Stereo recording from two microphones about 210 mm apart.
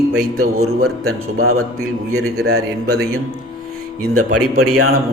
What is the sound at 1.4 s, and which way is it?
A man's voice, 90° right.